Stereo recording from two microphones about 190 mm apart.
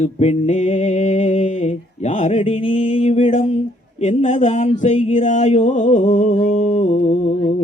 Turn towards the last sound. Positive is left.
turn(degrees=35)  # may be behind; listen again after turning